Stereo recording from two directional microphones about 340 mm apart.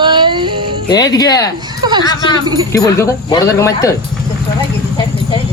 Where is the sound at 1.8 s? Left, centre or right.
Centre.